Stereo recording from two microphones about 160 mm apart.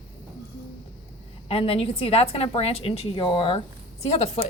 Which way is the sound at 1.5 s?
40° left (ahead or behind).